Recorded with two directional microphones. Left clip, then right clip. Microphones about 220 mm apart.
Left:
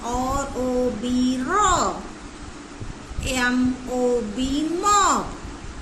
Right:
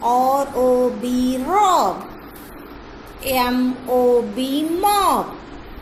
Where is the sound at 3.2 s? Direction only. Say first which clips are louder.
Right 3 dB; centre (ahead or behind).